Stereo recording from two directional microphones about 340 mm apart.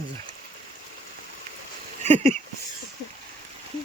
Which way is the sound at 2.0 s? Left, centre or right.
Centre.